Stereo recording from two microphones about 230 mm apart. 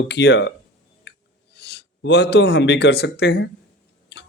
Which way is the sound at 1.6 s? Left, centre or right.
Left.